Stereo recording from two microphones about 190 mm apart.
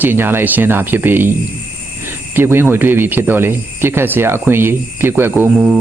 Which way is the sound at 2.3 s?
10° right (ahead or behind).